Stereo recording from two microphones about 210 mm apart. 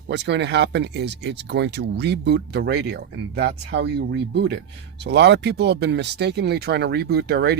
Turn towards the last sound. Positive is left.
turn(degrees=-50)  # may be behind; listen again after turning